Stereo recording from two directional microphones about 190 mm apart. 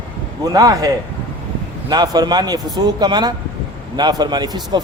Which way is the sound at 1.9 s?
20° right (ahead or behind).